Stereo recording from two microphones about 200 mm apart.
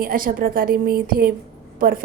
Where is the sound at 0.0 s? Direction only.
45° right (ahead or behind).